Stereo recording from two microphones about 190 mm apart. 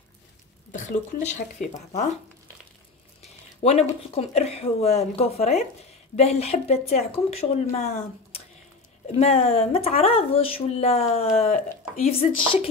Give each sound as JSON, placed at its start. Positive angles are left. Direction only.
{"t": 0.7, "sound": "a sound", "side_deg": 40}
{"t": 1.2, "sound": "speech", "side_deg": 40}
{"t": 3.6, "sound": "speech", "side_deg": 30}
{"t": 9.0, "sound": "speech", "side_deg": 35}